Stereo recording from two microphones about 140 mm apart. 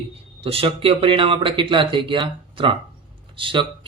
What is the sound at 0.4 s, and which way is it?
Speech, 45° right (ahead or behind).